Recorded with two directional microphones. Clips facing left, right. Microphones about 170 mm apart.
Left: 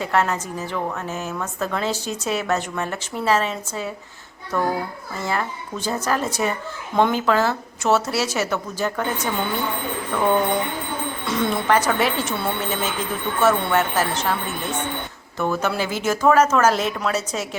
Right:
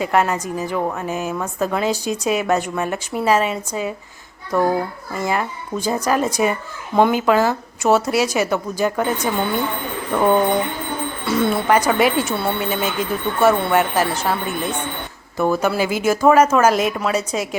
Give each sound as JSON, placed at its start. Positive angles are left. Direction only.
{"t": 0.0, "sound": "speech", "side_deg": -10}
{"t": 5.2, "sound": "speech", "side_deg": -15}
{"t": 11.3, "sound": "speech", "side_deg": -5}